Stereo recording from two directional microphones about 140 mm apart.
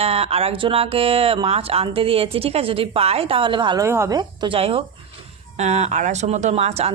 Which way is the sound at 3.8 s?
20° right (ahead or behind).